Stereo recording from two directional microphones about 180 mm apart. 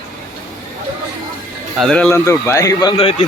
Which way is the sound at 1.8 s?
5° left (ahead or behind).